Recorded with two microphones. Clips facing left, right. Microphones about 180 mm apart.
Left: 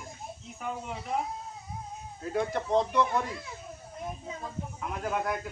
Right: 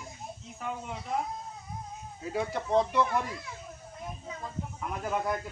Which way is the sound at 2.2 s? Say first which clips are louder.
Left 2 dB; 5° right (ahead or behind).